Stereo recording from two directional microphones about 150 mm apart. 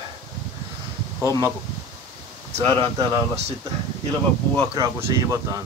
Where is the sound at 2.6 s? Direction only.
35° right (ahead or behind).